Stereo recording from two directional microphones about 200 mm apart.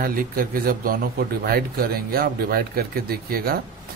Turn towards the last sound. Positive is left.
turn(degrees=-50)  # may be behind; listen again after turning